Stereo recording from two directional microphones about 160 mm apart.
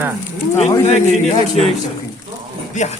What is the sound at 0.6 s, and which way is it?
Speech, 45° left (ahead or behind).